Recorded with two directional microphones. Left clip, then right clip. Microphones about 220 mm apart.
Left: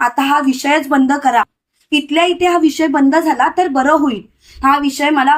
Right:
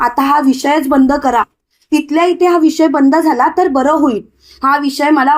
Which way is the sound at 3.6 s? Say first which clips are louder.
Right 1 dB; centre (ahead or behind).